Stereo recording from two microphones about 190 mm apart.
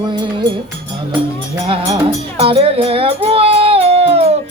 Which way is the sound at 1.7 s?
30° right (ahead or behind).